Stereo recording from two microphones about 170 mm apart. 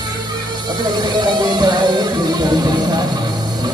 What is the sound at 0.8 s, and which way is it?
Music, 25° right (ahead or behind).